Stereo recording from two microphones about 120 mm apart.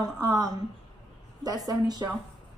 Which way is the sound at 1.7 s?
35° right (ahead or behind).